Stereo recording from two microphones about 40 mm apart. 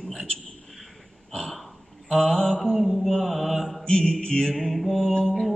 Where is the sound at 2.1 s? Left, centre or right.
Centre.